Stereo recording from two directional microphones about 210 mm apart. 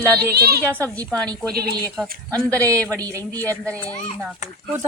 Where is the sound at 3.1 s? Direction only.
15° right (ahead or behind).